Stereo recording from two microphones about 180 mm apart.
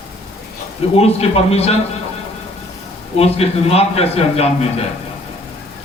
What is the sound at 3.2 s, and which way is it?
A man's voice, 35° left (ahead or behind).